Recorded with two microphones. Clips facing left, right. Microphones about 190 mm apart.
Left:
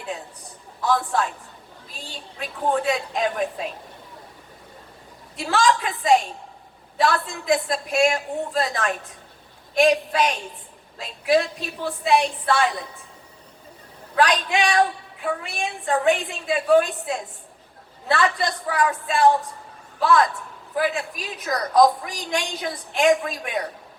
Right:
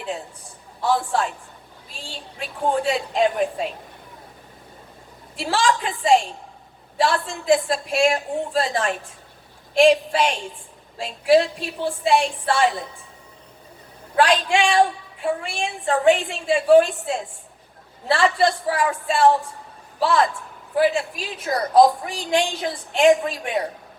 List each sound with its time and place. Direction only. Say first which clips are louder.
0.8 s a woman's voice: right 1 dB; 30° right (ahead or behind)
5.4 s a woman's voice: left 1 dB; 30° right (ahead or behind)
14.2 s a woman's voice: right 2 dB; 30° right (ahead or behind)